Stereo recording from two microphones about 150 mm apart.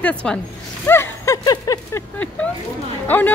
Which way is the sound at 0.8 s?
15° left (ahead or behind).